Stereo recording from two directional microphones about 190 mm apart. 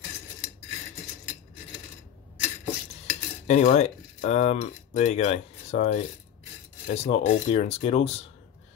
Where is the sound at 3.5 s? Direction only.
35° left (ahead or behind).